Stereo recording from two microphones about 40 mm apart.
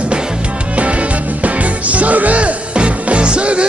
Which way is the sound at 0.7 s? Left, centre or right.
Right.